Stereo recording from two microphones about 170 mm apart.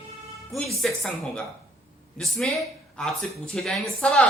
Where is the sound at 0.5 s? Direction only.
Centre (ahead or behind).